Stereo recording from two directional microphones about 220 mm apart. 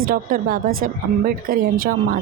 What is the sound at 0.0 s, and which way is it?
Speech, 40° right (ahead or behind).